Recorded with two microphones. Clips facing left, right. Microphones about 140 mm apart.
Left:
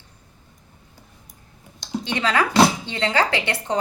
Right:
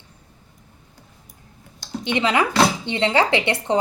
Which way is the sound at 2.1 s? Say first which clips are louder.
Even; 20° right (ahead or behind).